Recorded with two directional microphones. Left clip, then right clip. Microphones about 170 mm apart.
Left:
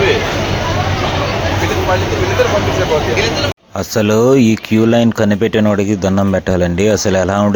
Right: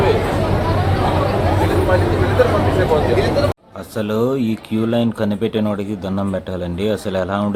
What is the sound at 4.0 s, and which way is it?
Speech, 40° left (ahead or behind).